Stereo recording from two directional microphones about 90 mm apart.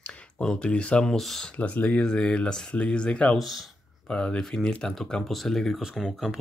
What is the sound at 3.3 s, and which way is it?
Speech, centre (ahead or behind).